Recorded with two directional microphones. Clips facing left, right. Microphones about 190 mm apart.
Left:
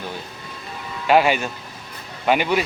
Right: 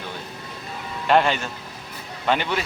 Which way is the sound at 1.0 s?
5° left (ahead or behind).